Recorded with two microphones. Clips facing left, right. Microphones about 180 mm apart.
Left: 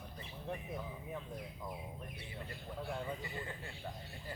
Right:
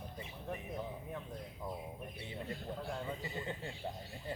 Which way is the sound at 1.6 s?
15° right (ahead or behind).